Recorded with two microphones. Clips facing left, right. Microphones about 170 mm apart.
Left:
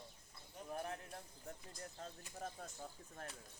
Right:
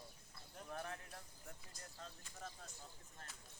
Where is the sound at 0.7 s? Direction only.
20° left (ahead or behind).